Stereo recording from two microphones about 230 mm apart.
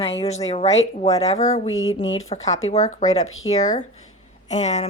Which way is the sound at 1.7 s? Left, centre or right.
Left.